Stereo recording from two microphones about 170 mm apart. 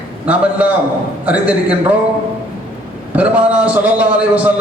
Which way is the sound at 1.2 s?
10° right (ahead or behind).